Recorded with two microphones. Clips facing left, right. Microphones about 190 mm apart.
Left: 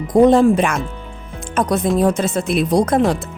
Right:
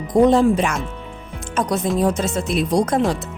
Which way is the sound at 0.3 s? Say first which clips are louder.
Left 3 dB; 55° left (ahead or behind).